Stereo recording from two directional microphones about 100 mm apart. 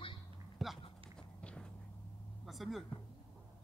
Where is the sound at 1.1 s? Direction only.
10° left (ahead or behind).